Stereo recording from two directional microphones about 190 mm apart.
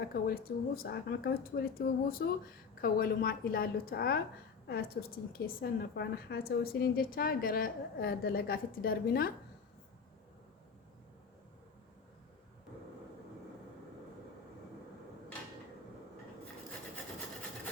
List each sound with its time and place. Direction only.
0.1 s a woman's voice: 55° left (ahead or behind)